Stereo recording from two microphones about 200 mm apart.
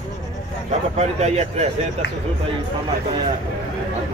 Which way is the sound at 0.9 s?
35° right (ahead or behind).